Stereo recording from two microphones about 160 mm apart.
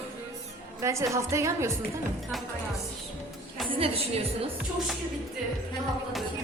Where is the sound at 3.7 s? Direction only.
35° right (ahead or behind).